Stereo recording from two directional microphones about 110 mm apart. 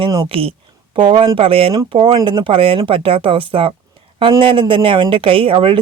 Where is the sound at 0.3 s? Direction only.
60° right (ahead or behind).